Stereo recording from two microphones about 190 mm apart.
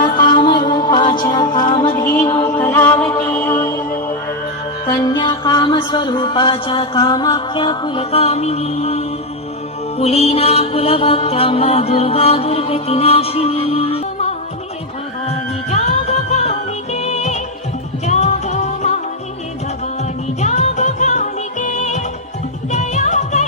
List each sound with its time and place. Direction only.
0.0 s music: 25° left (ahead or behind)
4.9 s music: 20° left (ahead or behind)
10.0 s mantra: 35° left (ahead or behind)
15.7 s music: 35° left (ahead or behind)
20.4 s music: 40° left (ahead or behind)